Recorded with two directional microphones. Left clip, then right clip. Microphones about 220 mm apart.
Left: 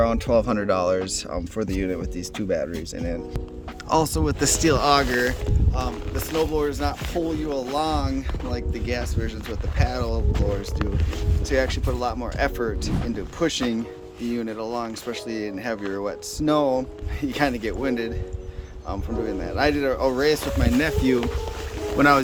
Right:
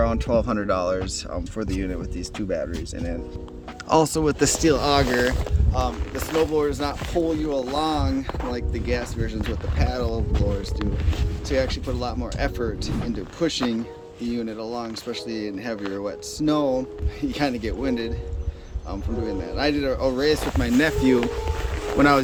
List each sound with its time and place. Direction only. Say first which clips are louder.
0.0 s speech: left 2 dB; 40° left (ahead or behind)
3.8 s speech: right 2 dB; centre (ahead or behind)
19.2 s speech: left 2 dB; 15° left (ahead or behind); by 20.9 s centre (ahead or behind)
21.9 s speech: left 1 dB; 5° left (ahead or behind)